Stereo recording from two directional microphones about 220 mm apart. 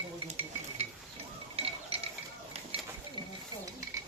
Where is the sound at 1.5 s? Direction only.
25° right (ahead or behind).